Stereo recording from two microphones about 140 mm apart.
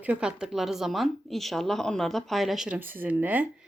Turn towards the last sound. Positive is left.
turn(degrees=-10)  # may be behind; listen again after turning